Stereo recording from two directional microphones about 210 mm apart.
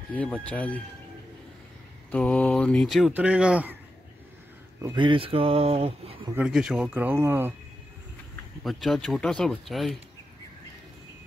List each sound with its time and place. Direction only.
0.1 s speech: 5° left (ahead or behind)
2.0 s speech: 5° left (ahead or behind)
4.8 s speech: 20° right (ahead or behind)
6.3 s speech: 5° right (ahead or behind)
8.6 s speech: centre (ahead or behind)